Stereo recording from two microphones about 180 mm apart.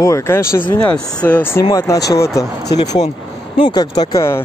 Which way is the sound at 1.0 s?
20° left (ahead or behind).